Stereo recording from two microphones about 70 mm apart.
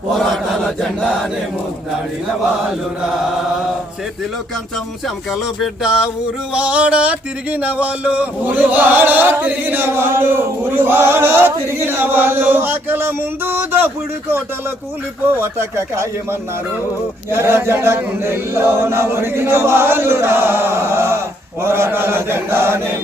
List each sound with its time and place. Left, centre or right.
0.3 s speech: centre
5.0 s speech: centre
6.5 s a sound: centre
15.4 s chant: right
17.3 s chant: right